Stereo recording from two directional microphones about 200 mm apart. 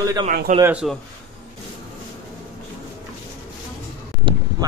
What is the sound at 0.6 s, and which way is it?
Speech, 5° right (ahead or behind).